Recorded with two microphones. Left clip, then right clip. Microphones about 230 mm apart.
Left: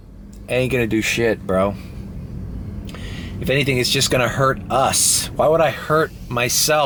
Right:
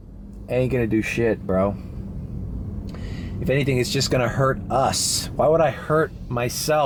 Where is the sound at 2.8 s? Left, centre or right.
Centre.